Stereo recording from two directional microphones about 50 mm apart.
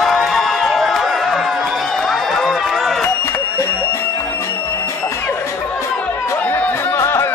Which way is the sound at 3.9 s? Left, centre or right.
Left.